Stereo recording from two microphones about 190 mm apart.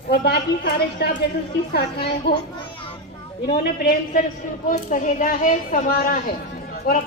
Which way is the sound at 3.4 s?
55° left (ahead or behind).